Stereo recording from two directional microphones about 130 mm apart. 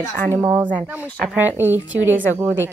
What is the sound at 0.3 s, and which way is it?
Speech, 15° right (ahead or behind).